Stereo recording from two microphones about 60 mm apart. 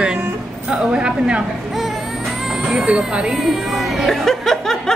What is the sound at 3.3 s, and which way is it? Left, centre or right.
Music, centre.